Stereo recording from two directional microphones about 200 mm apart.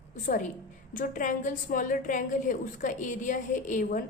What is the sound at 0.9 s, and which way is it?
A woman's voice, 40° left (ahead or behind).